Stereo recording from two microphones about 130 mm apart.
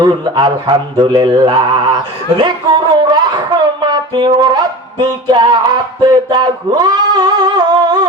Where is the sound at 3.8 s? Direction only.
35° right (ahead or behind).